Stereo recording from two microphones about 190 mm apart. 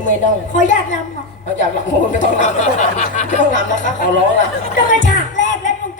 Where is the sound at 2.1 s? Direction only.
40° left (ahead or behind).